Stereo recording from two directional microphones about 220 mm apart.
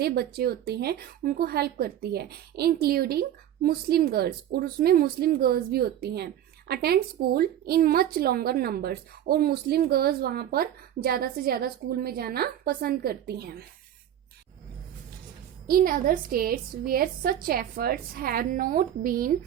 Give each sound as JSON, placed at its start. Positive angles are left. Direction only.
{"t": 0.0, "sound": "speech", "side_deg": -45}
{"t": 15.6, "sound": "a woman's voice", "side_deg": -40}